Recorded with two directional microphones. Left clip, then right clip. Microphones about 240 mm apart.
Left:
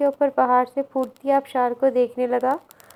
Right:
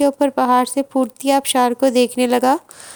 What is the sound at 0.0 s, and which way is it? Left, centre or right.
A woman's voice, right.